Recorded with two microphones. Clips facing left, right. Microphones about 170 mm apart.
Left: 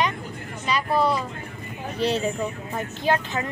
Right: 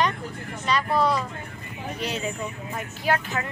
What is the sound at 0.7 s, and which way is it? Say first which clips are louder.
Vehicle: even; 5° left (ahead or behind).